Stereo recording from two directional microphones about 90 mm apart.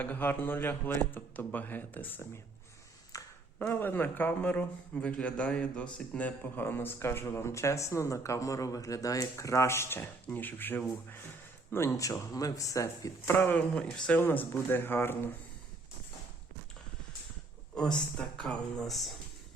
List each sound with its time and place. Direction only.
0.0 s speech: 20° left (ahead or behind)
3.1 s a sound: 40° left (ahead or behind)
3.7 s speech: 20° left (ahead or behind)
17.7 s speech: 10° left (ahead or behind)